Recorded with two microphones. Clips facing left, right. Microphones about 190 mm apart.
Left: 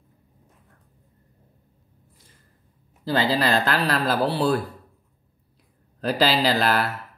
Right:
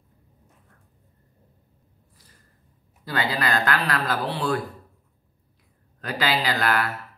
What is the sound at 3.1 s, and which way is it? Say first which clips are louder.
Speech: left 4 dB; 30° left (ahead or behind).